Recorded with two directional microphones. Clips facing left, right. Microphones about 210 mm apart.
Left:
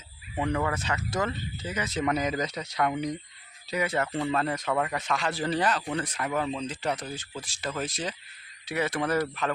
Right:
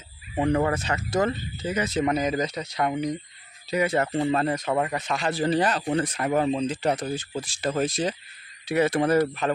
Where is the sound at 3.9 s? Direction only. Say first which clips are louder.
Right 4 dB; 30° right (ahead or behind).